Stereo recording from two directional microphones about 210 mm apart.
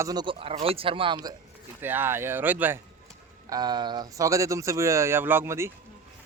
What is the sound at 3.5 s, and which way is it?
Speech, 20° right (ahead or behind).